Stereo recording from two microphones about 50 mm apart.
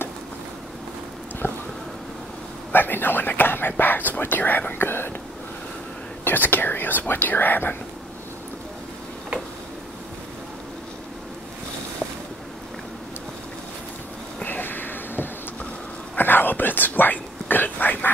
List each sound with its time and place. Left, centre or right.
1.4 s speech: left
2.7 s speech: left
6.2 s speech: left
14.4 s a sound: left
16.2 s whispering: left